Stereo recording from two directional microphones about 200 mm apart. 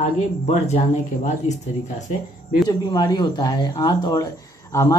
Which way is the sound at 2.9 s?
20° left (ahead or behind).